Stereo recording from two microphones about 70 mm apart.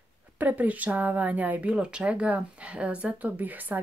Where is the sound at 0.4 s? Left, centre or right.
Right.